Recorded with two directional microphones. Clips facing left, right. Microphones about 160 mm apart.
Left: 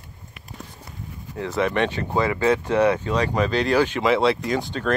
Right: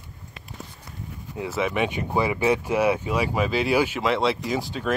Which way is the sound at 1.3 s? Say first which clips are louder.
Left 3 dB; 10° right (ahead or behind).